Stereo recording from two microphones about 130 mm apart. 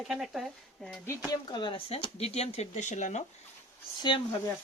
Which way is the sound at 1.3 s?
35° left (ahead or behind).